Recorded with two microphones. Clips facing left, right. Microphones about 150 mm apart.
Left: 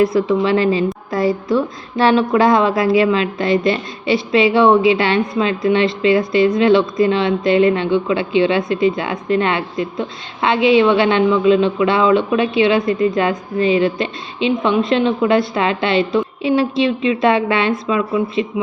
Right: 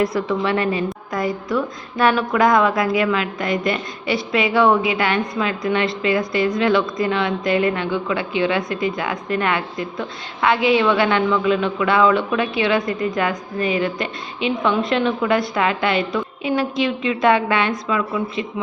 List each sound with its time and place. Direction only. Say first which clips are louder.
0.0 s a woman's voice: left 5 dB; 25° left (ahead or behind)